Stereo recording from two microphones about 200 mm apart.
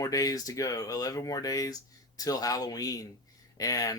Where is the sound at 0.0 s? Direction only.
15° left (ahead or behind).